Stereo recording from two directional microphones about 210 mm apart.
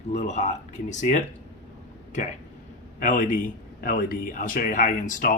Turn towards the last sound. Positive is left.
turn(degrees=40)  # may be behind; listen again after turning